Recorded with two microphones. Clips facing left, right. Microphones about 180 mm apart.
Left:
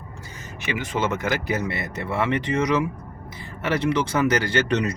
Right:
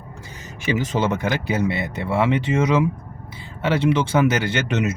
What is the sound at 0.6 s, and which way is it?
Speech, 35° right (ahead or behind).